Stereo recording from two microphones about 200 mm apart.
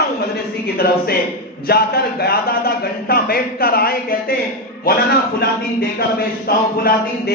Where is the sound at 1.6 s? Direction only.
50° left (ahead or behind).